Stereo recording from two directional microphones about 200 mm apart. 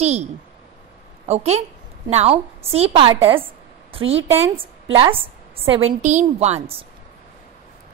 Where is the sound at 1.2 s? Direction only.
35° right (ahead or behind).